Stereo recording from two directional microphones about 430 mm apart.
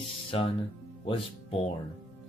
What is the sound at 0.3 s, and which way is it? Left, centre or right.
Speech, centre.